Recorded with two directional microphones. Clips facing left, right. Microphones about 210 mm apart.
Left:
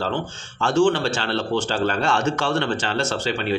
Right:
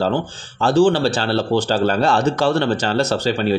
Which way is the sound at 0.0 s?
35° right (ahead or behind).